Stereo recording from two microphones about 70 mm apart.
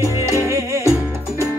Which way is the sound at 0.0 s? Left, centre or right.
Right.